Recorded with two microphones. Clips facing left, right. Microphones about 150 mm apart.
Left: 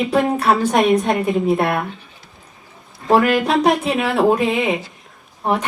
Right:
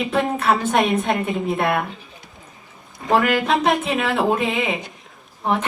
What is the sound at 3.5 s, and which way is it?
Speech, 35° left (ahead or behind).